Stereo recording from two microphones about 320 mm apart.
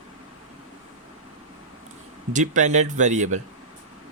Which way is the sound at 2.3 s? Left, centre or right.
Right.